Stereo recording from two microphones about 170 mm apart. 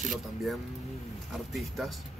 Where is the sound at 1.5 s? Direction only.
Centre (ahead or behind).